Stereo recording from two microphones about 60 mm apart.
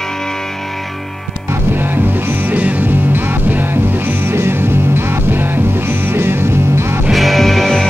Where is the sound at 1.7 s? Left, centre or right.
Right.